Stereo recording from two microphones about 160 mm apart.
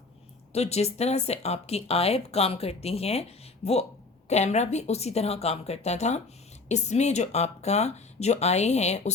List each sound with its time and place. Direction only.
0.5 s speech: 40° left (ahead or behind)